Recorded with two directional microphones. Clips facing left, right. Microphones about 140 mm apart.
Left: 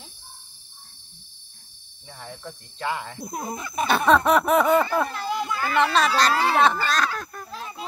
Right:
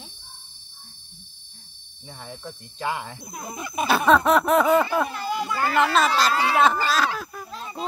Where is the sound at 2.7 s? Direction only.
10° right (ahead or behind).